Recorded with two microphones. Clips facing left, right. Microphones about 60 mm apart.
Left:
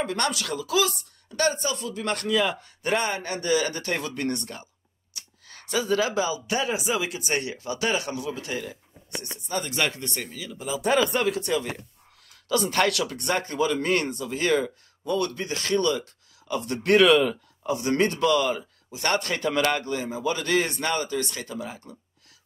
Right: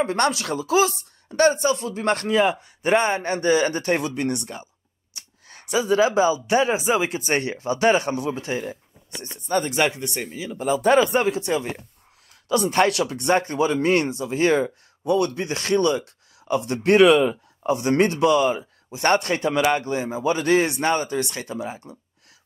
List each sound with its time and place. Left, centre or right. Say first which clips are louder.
0.0 s speech: right 5 dB; right
4.0 s speech: right 4 dB; centre
9.7 s speech: right 5 dB; right
10.6 s speech: right 6 dB; right
11.0 s speech: right 4 dB; right
18.9 s speech: right 6 dB; right
19.4 s speech: right 4 dB; centre
19.9 s speech: right 4 dB; right